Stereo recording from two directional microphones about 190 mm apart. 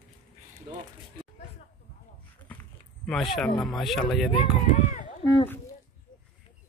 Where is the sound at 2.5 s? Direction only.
5° left (ahead or behind).